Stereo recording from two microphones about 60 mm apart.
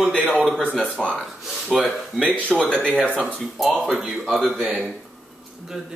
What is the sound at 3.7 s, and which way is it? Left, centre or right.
Speech, centre.